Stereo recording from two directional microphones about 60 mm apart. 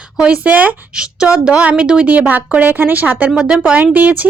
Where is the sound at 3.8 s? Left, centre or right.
Right.